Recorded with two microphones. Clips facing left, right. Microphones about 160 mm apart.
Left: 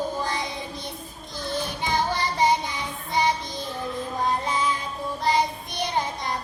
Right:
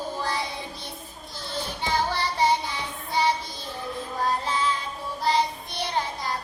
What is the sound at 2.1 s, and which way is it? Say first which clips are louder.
Child singing: left 2 dB; 15° left (ahead or behind).